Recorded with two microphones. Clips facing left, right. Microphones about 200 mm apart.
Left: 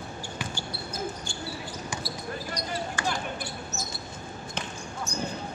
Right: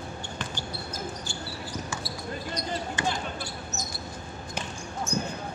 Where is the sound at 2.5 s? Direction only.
20° right (ahead or behind).